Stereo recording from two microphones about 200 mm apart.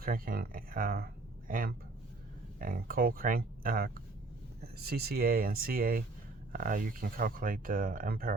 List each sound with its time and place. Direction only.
0.0 s speech: 45° right (ahead or behind)